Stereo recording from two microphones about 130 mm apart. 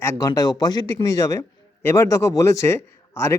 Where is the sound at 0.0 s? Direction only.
25° left (ahead or behind).